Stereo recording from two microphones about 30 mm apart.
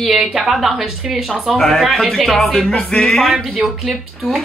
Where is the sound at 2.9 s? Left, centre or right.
Left.